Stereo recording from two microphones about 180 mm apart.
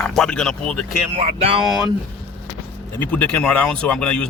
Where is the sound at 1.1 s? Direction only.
30° right (ahead or behind).